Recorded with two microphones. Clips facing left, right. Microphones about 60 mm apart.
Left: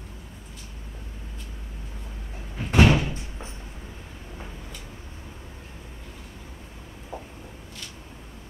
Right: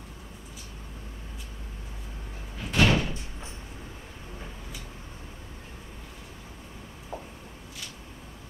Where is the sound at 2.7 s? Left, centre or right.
Left.